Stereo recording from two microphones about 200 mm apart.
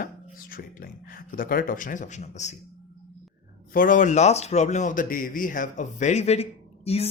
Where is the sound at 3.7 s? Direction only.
45° left (ahead or behind).